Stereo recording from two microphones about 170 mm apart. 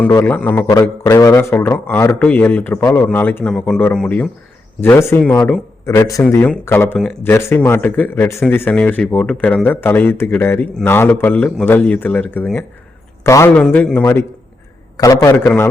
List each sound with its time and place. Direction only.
0.0 s speech: 15° left (ahead or behind)
0.7 s speech: 20° left (ahead or behind)